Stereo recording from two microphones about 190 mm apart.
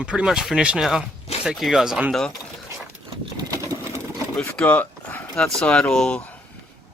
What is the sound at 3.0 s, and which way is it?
Sewing machine, 25° right (ahead or behind).